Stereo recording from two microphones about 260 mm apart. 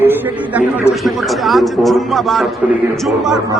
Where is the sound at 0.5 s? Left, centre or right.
Centre.